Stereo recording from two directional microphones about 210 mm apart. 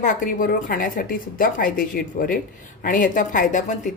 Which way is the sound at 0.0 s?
40° left (ahead or behind).